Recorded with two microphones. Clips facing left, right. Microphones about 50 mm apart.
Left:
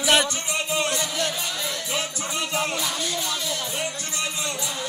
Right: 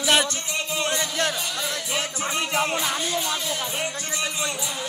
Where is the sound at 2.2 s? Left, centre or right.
Right.